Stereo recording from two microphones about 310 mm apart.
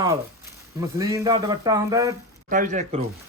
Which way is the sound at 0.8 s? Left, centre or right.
Centre.